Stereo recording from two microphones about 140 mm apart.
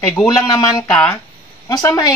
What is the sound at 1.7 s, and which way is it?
Speech, 25° left (ahead or behind).